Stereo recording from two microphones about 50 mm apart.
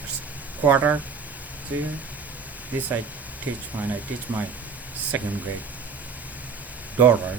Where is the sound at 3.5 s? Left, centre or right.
Right.